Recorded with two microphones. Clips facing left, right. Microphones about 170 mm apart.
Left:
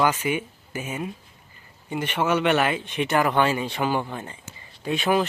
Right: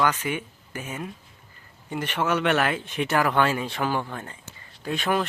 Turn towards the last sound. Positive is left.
turn(degrees=5)  # may be behind; listen again after turning